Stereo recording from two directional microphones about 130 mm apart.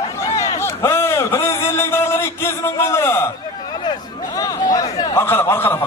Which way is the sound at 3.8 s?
30° left (ahead or behind).